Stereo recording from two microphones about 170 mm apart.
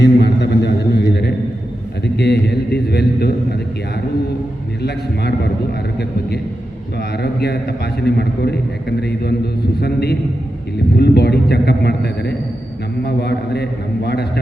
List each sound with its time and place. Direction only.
0.0 s a sound: 75° left (ahead or behind)
2.1 s a man's voice: 75° left (ahead or behind)
4.8 s a man's voice: 75° left (ahead or behind)
7.2 s a man's voice: 75° left (ahead or behind)